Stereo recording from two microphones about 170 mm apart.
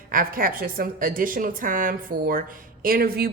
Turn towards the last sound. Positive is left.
turn(degrees=-65)  # may be behind; listen again after turning